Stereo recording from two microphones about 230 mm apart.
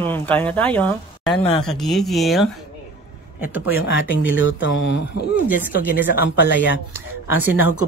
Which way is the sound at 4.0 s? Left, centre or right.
Left.